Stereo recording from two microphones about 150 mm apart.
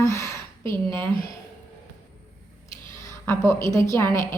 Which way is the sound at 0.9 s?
15° left (ahead or behind).